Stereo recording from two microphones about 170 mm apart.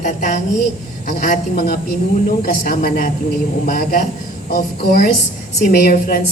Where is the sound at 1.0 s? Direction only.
55° left (ahead or behind).